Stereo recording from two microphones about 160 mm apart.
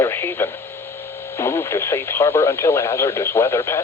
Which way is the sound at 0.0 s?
15° left (ahead or behind).